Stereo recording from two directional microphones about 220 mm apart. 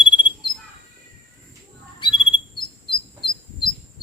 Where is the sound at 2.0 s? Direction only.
20° left (ahead or behind).